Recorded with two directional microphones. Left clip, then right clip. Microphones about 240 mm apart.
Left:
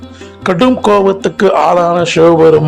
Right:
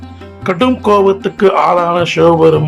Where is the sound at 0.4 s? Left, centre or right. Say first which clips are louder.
Left 2 dB; left.